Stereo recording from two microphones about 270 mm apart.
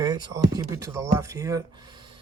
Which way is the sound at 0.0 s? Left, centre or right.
Centre.